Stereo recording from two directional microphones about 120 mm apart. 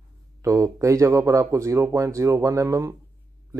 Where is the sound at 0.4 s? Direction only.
25° right (ahead or behind).